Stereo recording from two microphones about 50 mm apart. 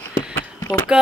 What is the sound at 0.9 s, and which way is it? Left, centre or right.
Speech, centre.